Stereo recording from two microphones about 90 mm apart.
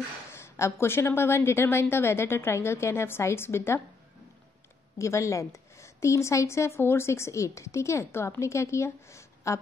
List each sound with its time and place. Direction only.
0.3 s a woman's voice: 30° left (ahead or behind)
4.9 s a woman's voice: 35° left (ahead or behind)